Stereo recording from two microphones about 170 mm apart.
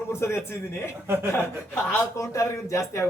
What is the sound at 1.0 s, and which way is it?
Speech, 10° right (ahead or behind).